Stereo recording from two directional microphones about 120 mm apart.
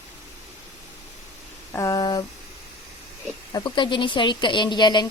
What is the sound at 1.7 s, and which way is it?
Speech, 30° left (ahead or behind).